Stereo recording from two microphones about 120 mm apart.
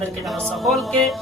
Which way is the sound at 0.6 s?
Centre (ahead or behind).